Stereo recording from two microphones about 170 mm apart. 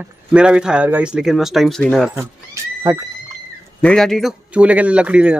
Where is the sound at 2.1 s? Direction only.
15° right (ahead or behind).